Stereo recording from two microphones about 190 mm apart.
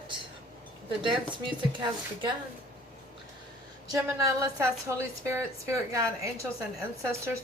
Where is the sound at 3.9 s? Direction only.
15° right (ahead or behind).